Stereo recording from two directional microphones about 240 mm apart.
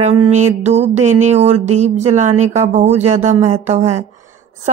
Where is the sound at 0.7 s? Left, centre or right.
Right.